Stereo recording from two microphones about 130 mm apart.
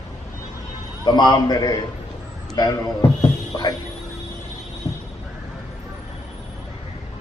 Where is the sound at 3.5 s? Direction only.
30° left (ahead or behind).